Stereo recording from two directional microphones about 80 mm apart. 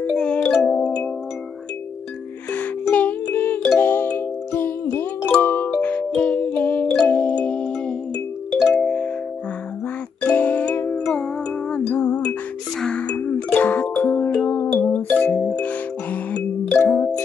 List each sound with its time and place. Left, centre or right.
0.1 s music: centre
2.5 s music: left
10.2 s music: centre
10.9 s music: centre
16.7 s music: left